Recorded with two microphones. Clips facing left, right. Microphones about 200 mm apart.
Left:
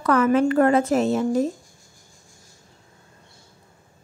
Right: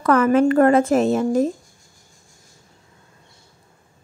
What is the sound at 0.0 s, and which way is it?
Speech, 50° right (ahead or behind).